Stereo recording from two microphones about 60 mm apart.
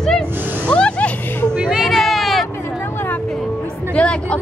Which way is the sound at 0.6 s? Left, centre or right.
Left.